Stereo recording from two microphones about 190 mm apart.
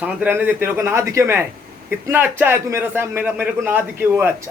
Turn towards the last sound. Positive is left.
turn(degrees=-10)  # may be behind; listen again after turning